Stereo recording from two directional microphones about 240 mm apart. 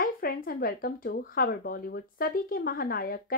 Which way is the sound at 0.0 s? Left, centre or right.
Left.